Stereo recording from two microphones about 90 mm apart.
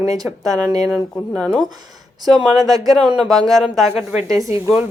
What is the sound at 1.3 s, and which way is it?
Speech, 5° left (ahead or behind).